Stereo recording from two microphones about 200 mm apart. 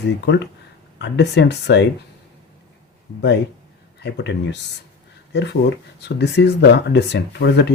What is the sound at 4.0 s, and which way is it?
Speech, 60° left (ahead or behind).